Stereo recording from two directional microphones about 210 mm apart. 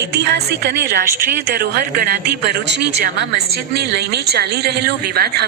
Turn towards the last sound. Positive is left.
turn(degrees=-50)  # may be behind; listen again after turning